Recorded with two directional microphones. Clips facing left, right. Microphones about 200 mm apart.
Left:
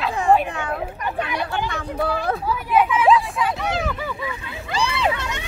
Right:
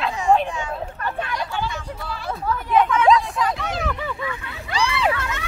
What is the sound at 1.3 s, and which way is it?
Hubbub, 60° left (ahead or behind).